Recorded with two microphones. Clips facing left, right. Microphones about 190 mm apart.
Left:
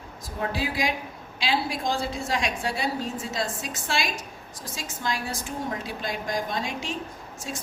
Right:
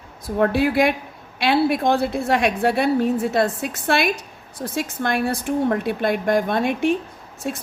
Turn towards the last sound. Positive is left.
turn(degrees=-60)  # may be behind; listen again after turning